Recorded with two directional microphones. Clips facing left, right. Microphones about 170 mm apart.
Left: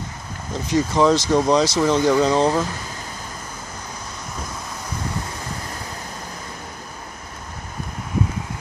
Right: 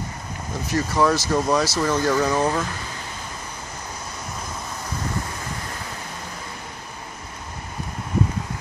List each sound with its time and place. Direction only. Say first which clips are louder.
0.7 s speech: left 3 dB; 20° left (ahead or behind)